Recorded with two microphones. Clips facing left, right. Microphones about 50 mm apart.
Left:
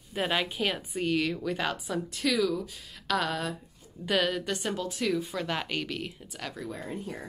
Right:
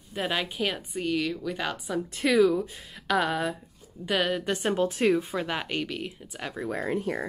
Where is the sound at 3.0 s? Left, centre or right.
Centre.